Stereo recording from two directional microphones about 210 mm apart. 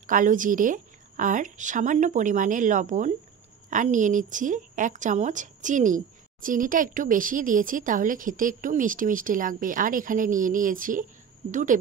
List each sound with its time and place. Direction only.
0.0 s a woman's voice: 40° right (ahead or behind)